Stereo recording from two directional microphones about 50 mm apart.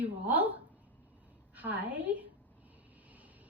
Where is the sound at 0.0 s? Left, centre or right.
Right.